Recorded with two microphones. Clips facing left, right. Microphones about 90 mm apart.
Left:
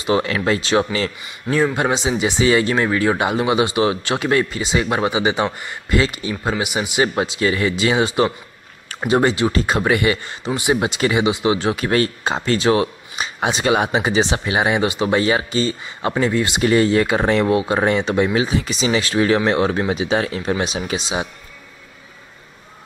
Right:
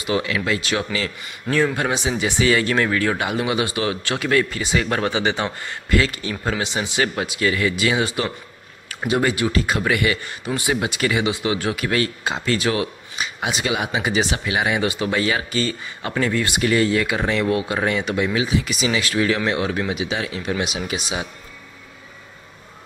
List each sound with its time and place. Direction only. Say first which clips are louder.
0.0 s speech: left 4 dB; 35° left (ahead or behind)
1.5 s speech: left 2 dB; 20° left (ahead or behind)